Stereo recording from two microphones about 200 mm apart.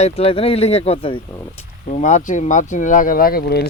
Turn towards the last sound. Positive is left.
turn(degrees=50)  # may be behind; listen again after turning